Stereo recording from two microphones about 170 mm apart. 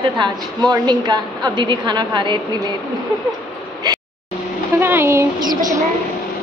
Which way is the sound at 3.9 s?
25° right (ahead or behind).